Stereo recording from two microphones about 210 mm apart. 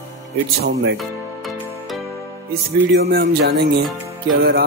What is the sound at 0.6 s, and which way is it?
Speech, 55° right (ahead or behind).